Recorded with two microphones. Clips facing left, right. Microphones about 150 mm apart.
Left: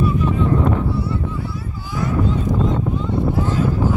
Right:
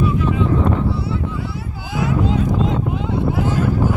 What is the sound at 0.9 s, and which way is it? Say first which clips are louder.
Music: even; 75° right (ahead or behind).